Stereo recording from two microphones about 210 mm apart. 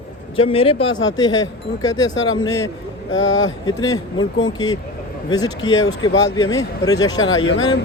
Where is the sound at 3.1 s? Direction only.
65° left (ahead or behind).